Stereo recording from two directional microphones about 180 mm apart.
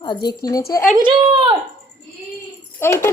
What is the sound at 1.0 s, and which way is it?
Speech, 25° right (ahead or behind).